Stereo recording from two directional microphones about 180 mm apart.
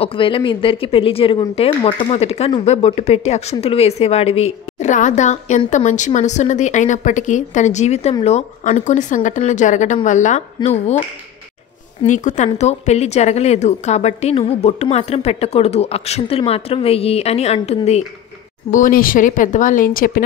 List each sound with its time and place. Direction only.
0.0 s a woman's voice: 30° left (ahead or behind)
12.1 s a woman's voice: 45° left (ahead or behind)
18.7 s speech: 50° left (ahead or behind)